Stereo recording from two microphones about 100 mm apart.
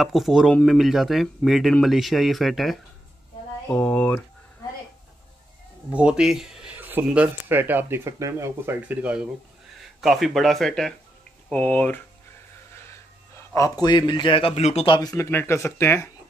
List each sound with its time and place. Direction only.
0.0 s speech: centre (ahead or behind)
3.6 s speech: 15° left (ahead or behind)
5.9 s speech: 10° right (ahead or behind)
6.8 s a sound: 20° right (ahead or behind)
7.4 s speech: 20° right (ahead or behind)
8.8 s speech: 15° right (ahead or behind)
9.9 s speech: centre (ahead or behind); by 12.0 s 15° left (ahead or behind)
13.6 s speech: 35° left (ahead or behind)
13.8 s speech: 50° left (ahead or behind); by 14.9 s 90° left
14.9 s speech: 40° left (ahead or behind)
15.1 s speech: 25° left (ahead or behind)